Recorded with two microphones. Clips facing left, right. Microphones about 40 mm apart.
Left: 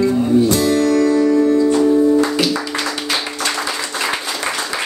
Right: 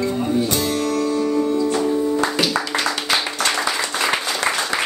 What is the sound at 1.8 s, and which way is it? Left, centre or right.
Music, left.